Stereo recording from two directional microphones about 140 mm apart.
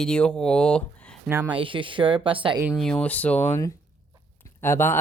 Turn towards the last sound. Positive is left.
turn(degrees=15)  # may be behind; listen again after turning